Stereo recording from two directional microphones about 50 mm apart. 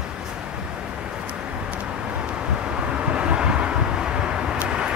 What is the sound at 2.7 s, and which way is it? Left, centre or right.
Vehicle, right.